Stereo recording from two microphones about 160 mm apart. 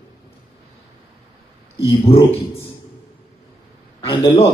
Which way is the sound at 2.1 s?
35° left (ahead or behind).